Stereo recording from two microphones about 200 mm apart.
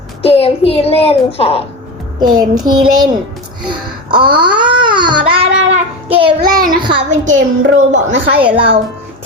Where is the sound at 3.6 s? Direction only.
25° right (ahead or behind).